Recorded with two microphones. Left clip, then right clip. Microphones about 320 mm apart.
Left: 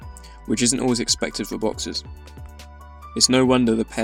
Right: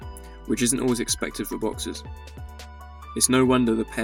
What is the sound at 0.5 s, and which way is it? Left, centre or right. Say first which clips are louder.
Speech: left 3 dB; right.